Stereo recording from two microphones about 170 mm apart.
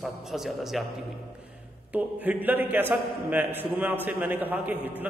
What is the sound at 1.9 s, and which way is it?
A man's voice, 10° right (ahead or behind).